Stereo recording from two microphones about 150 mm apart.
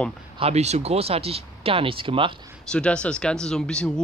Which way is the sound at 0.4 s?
45° right (ahead or behind).